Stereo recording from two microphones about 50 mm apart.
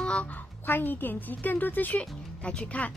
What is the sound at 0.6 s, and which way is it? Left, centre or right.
Speech, left.